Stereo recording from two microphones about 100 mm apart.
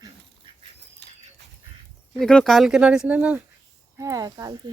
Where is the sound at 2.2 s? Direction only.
5° left (ahead or behind); by 3.4 s 15° right (ahead or behind).